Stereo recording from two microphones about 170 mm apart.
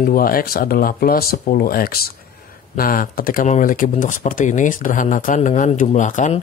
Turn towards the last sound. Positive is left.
turn(degrees=45)  # may be behind; listen again after turning